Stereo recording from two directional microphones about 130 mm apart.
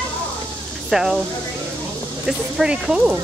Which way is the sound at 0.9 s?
5° right (ahead or behind).